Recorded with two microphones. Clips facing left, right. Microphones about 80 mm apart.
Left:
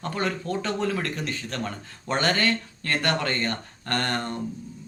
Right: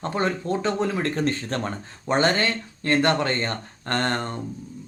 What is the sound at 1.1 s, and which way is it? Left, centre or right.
Speech, right.